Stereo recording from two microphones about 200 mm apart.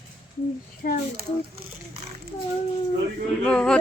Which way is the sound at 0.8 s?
40° left (ahead or behind).